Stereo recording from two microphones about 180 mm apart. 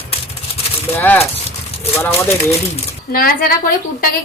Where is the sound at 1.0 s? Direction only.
10° left (ahead or behind).